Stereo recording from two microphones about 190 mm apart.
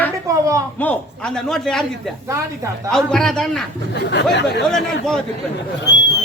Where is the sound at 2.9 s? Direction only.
Centre (ahead or behind).